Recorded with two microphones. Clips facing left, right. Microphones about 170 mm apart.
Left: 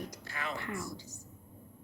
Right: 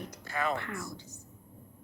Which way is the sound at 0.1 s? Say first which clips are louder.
Right 7 dB; 55° right (ahead or behind).